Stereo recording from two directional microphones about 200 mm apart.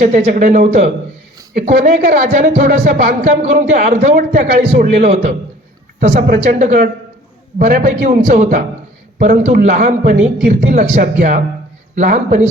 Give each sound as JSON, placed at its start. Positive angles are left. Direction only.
{"t": 0.0, "sound": "a man's voice", "side_deg": -35}